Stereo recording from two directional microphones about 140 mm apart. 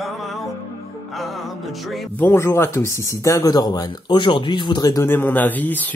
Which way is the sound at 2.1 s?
15° left (ahead or behind).